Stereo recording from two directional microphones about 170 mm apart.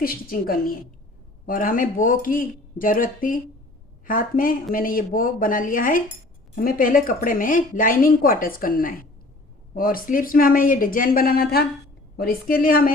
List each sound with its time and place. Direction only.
0.0 s speech: 60° left (ahead or behind)